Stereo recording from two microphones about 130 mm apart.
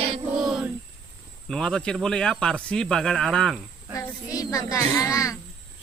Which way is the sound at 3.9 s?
25° left (ahead or behind).